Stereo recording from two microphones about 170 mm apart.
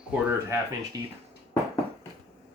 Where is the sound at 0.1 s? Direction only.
10° right (ahead or behind).